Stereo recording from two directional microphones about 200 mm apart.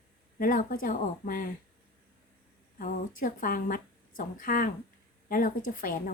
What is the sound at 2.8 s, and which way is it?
Speech, 45° left (ahead or behind).